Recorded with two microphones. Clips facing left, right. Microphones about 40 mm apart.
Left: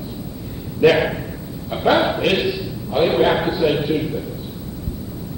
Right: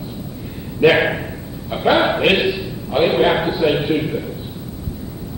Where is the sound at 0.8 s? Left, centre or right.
Right.